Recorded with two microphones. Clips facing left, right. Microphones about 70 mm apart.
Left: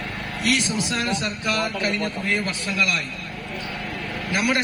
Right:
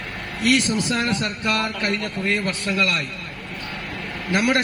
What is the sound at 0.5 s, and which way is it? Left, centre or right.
A man's voice, right.